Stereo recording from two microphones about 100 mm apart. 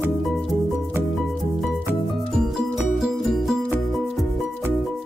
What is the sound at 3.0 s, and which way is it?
Music, 5° right (ahead or behind).